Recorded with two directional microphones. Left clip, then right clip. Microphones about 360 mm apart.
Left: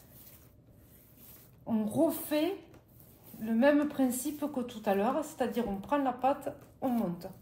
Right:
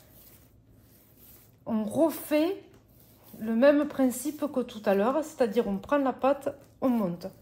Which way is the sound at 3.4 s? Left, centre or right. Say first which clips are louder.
Right 5 dB; right.